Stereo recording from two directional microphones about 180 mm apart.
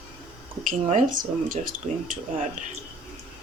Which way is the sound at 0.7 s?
50° right (ahead or behind).